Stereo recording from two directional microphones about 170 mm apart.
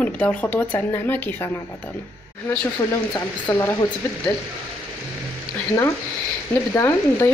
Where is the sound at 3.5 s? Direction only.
20° left (ahead or behind).